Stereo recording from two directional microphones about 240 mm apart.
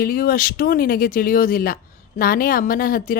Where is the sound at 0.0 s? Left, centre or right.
Left.